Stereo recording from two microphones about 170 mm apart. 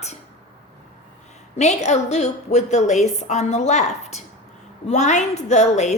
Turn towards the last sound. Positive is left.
turn(degrees=45)  # may be behind; listen again after turning